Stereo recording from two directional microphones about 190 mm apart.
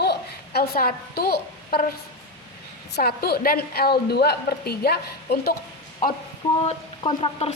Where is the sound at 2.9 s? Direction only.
55° left (ahead or behind).